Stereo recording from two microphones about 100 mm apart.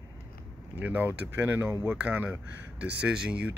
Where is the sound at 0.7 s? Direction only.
15° right (ahead or behind).